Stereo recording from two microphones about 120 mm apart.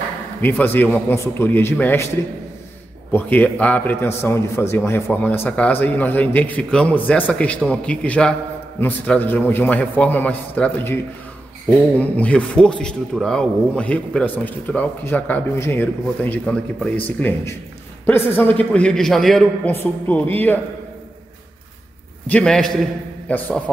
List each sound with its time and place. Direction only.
0.4 s a man's voice: 15° left (ahead or behind)
3.1 s a man's voice: 15° left (ahead or behind)
12.0 s a man's voice: 10° left (ahead or behind)
19.6 s a man's voice: 15° left (ahead or behind)
22.3 s a man's voice: 5° left (ahead or behind)